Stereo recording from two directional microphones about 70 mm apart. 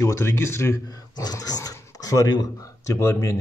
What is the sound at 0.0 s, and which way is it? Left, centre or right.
Speech, left.